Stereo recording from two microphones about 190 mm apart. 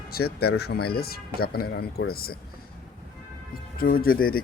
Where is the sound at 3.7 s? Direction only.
50° left (ahead or behind).